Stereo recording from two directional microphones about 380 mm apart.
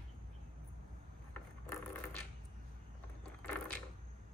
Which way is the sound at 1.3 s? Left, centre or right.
Centre.